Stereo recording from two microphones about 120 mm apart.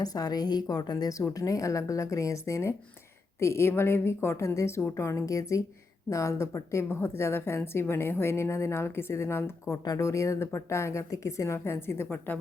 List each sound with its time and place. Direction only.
0.0 s a woman's voice: 30° left (ahead or behind)